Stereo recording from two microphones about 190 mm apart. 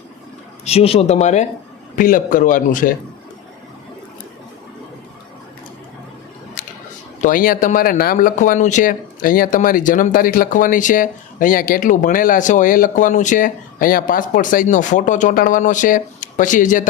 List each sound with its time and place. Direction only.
0.6 s speech: 30° left (ahead or behind)
6.6 s a sound: 45° left (ahead or behind)
7.2 s speech: 45° left (ahead or behind)